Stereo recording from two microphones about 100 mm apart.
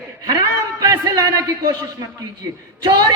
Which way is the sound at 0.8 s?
35° right (ahead or behind).